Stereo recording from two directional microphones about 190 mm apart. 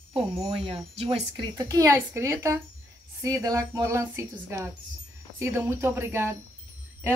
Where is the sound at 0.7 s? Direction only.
30° right (ahead or behind).